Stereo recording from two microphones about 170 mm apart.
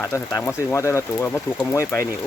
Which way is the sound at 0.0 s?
20° left (ahead or behind).